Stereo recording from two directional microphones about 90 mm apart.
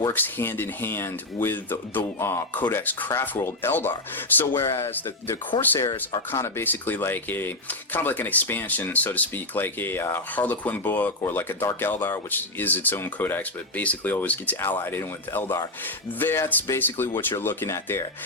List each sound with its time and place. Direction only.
0.1 s speech: 25° left (ahead or behind)
4.4 s speech: 35° left (ahead or behind)
6.3 s speech: 25° left (ahead or behind)